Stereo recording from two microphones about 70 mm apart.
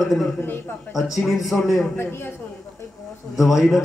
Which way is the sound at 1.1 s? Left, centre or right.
Centre.